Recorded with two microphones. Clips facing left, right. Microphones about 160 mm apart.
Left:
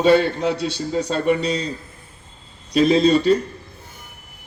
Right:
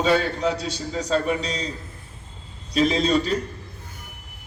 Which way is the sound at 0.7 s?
60° left (ahead or behind).